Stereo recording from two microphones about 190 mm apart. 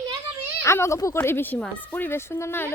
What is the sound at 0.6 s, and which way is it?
A woman's voice, 15° left (ahead or behind).